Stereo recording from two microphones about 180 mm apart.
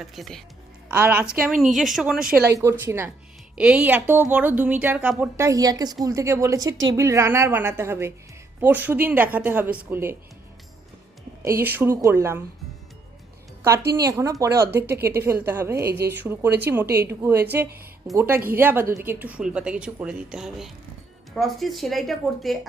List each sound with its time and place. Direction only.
0.0 s speech: centre (ahead or behind)
2.2 s speech: 55° right (ahead or behind)
2.6 s speech: 15° right (ahead or behind)
11.4 s speech: 10° right (ahead or behind)
13.9 s speech: 15° right (ahead or behind)
15.8 s speech: 65° right (ahead or behind)
16.0 s speech: 10° right (ahead or behind)